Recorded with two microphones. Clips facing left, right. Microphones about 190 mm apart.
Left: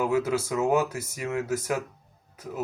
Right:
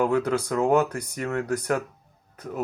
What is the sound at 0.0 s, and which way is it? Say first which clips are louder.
Speech: right 2 dB; 5° left (ahead or behind).